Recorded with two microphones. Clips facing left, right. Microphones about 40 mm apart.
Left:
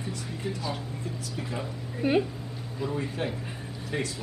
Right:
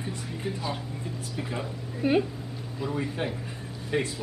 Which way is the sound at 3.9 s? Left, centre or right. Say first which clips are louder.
Right 4 dB; centre.